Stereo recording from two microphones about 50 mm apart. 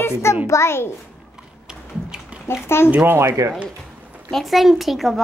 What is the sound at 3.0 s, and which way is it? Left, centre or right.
Speech, right.